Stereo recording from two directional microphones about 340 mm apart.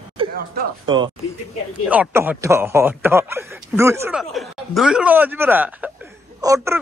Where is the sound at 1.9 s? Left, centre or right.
Centre.